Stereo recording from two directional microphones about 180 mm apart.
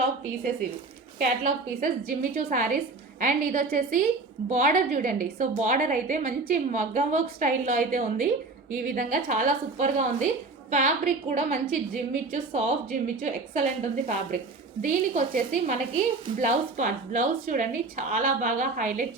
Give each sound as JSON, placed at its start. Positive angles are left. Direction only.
{"t": 1.2, "sound": "a woman's voice", "side_deg": -50}